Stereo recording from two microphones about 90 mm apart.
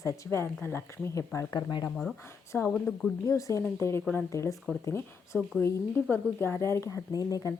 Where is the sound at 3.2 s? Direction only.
35° left (ahead or behind).